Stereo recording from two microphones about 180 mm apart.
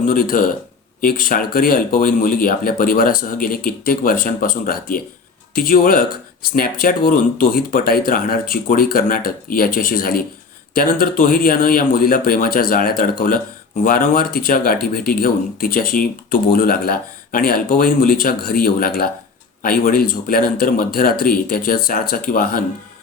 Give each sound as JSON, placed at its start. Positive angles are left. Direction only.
{"t": 0.0, "sound": "speech", "side_deg": 50}